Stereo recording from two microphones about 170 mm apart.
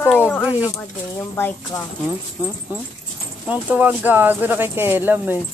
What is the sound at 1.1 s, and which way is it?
Speech, 15° left (ahead or behind).